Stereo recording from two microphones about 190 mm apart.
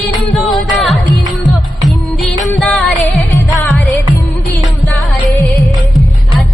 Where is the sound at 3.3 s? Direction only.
15° left (ahead or behind).